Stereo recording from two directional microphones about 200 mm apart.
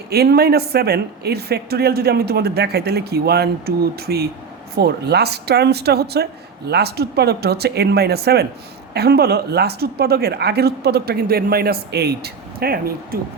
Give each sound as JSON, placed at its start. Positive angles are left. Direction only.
{"t": 0.1, "sound": "a woman's voice", "side_deg": -50}